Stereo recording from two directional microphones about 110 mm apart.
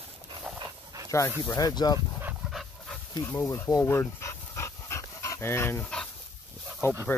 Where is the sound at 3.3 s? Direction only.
25° left (ahead or behind).